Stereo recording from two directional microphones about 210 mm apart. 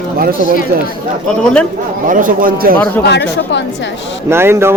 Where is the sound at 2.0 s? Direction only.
40° right (ahead or behind).